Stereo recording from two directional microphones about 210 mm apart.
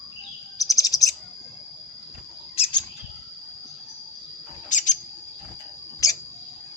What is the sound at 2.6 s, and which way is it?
Bird, 20° left (ahead or behind).